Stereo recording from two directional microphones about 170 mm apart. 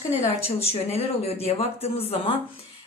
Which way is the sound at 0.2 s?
35° left (ahead or behind).